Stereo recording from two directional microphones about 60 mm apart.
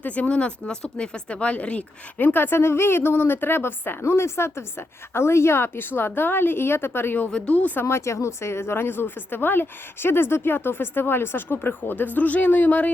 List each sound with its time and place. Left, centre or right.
0.0 s speech: left
7.3 s a woman's voice: centre
7.9 s speech: left